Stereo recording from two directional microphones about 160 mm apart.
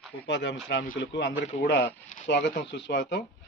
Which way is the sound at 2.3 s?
90° left.